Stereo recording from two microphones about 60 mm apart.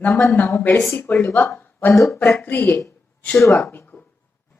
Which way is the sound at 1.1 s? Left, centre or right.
Left.